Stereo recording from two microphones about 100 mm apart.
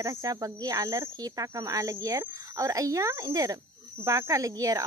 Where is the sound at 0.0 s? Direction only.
35° right (ahead or behind).